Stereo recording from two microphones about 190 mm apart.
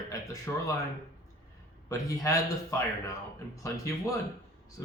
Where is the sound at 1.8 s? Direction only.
15° left (ahead or behind).